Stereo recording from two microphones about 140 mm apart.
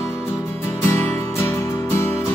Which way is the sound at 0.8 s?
15° left (ahead or behind).